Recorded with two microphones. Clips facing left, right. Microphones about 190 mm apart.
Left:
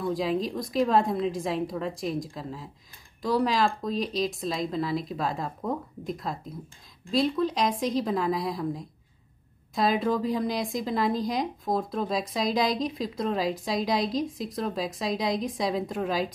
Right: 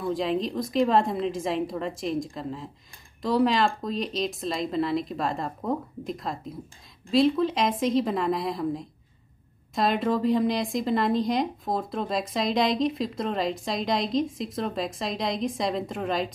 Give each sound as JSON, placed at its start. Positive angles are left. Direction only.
{"t": 0.0, "sound": "speech", "side_deg": 0}